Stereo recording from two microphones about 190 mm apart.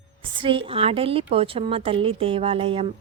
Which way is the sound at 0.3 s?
25° right (ahead or behind).